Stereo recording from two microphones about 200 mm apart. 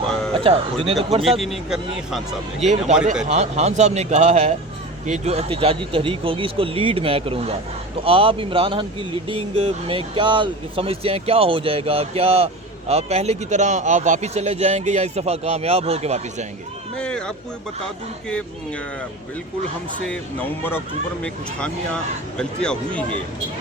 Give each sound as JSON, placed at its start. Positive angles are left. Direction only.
{"t": 0.3, "sound": "speech", "side_deg": -25}
{"t": 1.2, "sound": "speech", "side_deg": 0}
{"t": 2.6, "sound": "a man's voice", "side_deg": -35}
{"t": 17.0, "sound": "speech", "side_deg": 5}
{"t": 20.1, "sound": "speech", "side_deg": 10}